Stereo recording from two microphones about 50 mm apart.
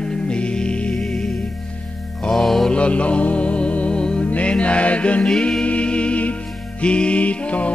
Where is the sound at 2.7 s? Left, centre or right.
Left.